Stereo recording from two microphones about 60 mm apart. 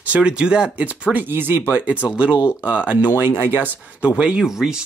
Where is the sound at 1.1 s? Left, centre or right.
Right.